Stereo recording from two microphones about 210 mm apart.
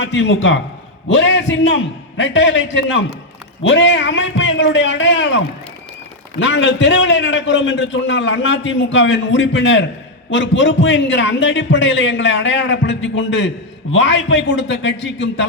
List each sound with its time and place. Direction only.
0.0 s a man's voice: 60° left (ahead or behind)
6.4 s a man's voice: 60° left (ahead or behind)